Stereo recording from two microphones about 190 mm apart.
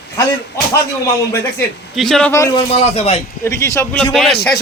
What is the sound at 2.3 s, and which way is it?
Speech, 15° left (ahead or behind).